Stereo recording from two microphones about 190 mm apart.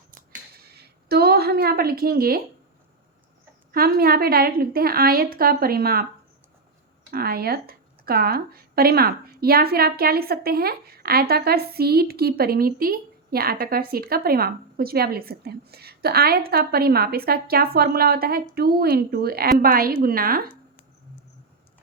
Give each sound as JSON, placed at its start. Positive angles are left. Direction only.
{"t": 0.8, "sound": "a sound", "side_deg": -55}
{"t": 3.7, "sound": "speech", "side_deg": -55}
{"t": 7.1, "sound": "speech", "side_deg": -55}